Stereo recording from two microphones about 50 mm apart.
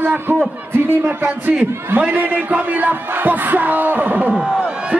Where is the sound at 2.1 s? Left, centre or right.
Right.